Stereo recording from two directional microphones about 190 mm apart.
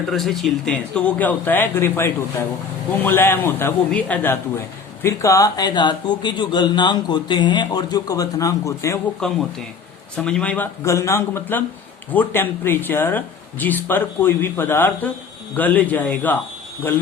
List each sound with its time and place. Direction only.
0.1 s speech: centre (ahead or behind); by 9.0 s 15° left (ahead or behind)
9.2 s speech: 5° left (ahead or behind)